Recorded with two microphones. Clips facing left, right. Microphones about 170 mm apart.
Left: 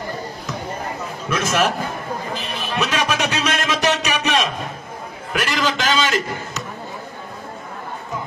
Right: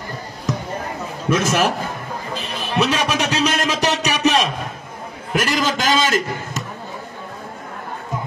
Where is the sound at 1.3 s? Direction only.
35° right (ahead or behind).